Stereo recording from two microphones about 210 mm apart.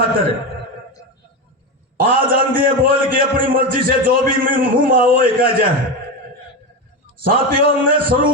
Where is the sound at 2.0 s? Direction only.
40° right (ahead or behind).